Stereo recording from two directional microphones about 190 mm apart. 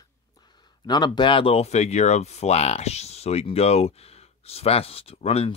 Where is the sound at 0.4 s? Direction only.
25° left (ahead or behind).